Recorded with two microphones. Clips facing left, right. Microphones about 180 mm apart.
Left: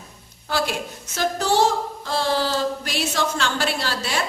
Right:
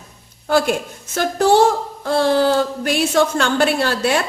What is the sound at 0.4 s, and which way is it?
A woman's voice, 50° right (ahead or behind).